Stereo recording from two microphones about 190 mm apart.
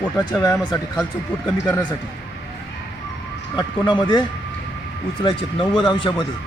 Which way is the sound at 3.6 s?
25° left (ahead or behind).